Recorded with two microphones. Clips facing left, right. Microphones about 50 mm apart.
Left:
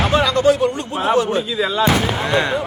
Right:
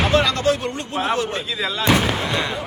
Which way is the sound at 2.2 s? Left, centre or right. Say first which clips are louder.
Left 5 dB; left.